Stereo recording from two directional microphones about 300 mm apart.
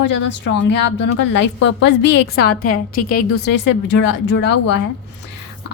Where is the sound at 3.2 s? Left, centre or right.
Left.